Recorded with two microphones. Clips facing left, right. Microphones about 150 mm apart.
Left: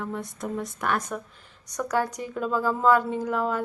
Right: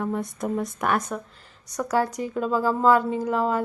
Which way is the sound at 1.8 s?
10° right (ahead or behind).